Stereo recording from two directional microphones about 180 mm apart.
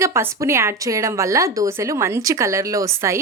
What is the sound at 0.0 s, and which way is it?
Speech, 15° right (ahead or behind).